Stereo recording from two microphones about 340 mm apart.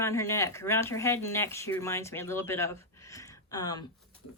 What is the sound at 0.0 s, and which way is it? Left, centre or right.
Speech, centre.